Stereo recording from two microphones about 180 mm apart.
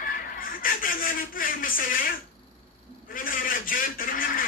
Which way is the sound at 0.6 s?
50° left (ahead or behind).